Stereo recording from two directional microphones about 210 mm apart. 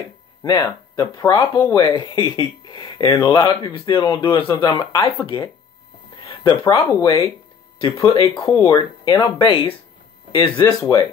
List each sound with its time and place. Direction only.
0.4 s speech: 15° left (ahead or behind)
6.2 s a sound: 20° left (ahead or behind)
6.7 s speech: 25° left (ahead or behind)
7.8 s speech: 15° left (ahead or behind)